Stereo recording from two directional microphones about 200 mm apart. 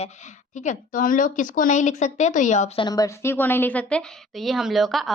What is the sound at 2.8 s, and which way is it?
A woman's voice, 20° left (ahead or behind).